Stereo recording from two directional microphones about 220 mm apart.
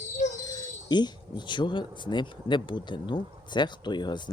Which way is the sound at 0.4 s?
20° left (ahead or behind).